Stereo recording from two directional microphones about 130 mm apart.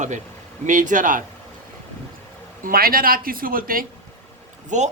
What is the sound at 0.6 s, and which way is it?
Speech, 80° right.